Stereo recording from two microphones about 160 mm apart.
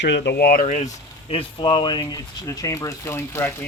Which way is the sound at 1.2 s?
35° left (ahead or behind).